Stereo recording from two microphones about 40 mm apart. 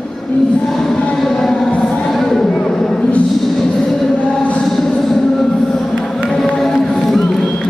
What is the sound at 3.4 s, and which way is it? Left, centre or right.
Music, centre.